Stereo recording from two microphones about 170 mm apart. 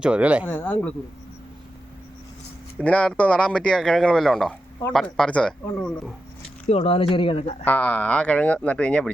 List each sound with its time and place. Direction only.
0.0 s speech: 5° right (ahead or behind)
0.4 s speech: 10° left (ahead or behind)
2.7 s a man's voice: 5° left (ahead or behind)
6.7 s speech: 35° left (ahead or behind)
7.6 s speech: 10° left (ahead or behind)